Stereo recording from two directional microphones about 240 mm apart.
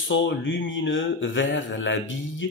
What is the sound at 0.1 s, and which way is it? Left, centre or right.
A man's voice, left.